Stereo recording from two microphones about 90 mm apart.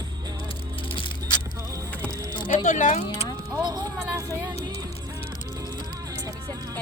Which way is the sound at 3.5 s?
45° right (ahead or behind).